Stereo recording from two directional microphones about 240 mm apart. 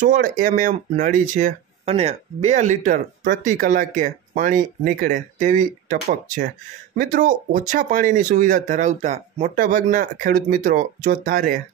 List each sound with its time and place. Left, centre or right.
0.0 s speech: right